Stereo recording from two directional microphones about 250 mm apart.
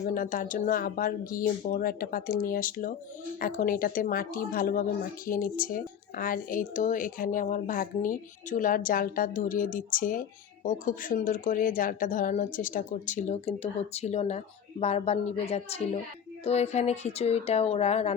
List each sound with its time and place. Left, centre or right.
0.0 s speech: left